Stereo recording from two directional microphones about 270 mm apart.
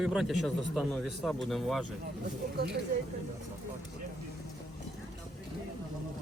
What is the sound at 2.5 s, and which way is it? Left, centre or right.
Speech, right.